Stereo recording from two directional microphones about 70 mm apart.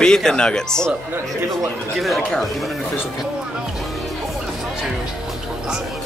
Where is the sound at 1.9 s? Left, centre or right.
Centre.